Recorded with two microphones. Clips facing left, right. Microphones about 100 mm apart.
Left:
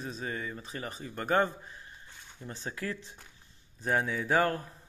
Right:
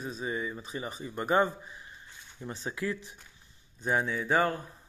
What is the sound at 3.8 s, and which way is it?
Speech, centre (ahead or behind).